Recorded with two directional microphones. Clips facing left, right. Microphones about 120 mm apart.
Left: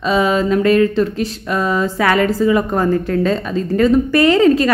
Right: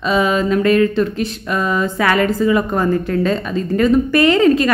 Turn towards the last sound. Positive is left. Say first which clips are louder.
# left 1 dB
turn(degrees=35)  # may be behind; listen again after turning